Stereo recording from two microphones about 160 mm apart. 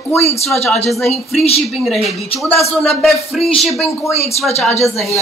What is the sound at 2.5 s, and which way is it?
Speech, 40° left (ahead or behind).